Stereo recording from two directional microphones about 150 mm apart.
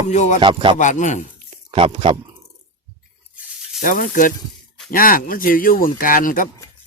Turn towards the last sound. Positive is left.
turn(degrees=65)  # may be behind; listen again after turning